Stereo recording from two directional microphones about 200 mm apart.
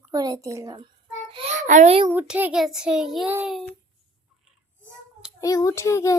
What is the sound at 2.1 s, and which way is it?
A child's voice, 10° right (ahead or behind).